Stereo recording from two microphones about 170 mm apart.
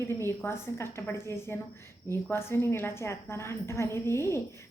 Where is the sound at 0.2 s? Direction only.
15° left (ahead or behind).